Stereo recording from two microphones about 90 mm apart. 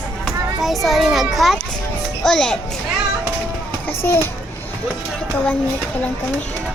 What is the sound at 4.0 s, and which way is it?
Speech, 25° left (ahead or behind).